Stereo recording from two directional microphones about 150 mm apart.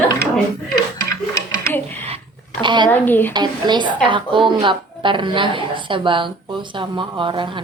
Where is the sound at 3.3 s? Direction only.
30° right (ahead or behind).